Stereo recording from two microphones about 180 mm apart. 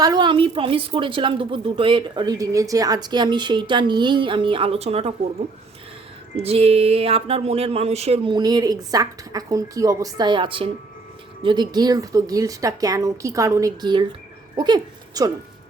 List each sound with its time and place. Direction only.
0.0 s a woman's voice: 25° right (ahead or behind)
6.3 s a woman's voice: 35° right (ahead or behind)